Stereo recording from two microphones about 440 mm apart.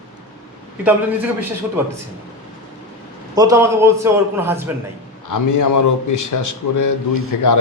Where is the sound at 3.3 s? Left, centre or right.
Centre.